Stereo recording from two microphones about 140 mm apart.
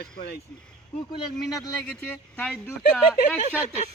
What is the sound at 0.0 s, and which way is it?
Speech, 90° left.